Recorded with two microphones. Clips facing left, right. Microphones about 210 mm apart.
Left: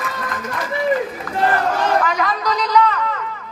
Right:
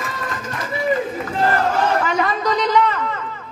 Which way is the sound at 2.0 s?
30° right (ahead or behind).